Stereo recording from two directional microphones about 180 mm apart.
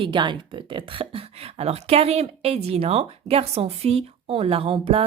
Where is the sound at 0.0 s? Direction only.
25° right (ahead or behind).